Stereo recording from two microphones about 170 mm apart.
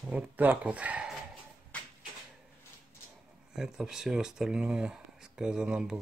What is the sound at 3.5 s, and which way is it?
Speech, 5° right (ahead or behind).